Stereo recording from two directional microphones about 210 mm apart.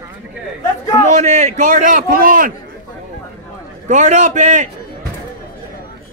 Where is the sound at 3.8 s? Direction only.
35° right (ahead or behind).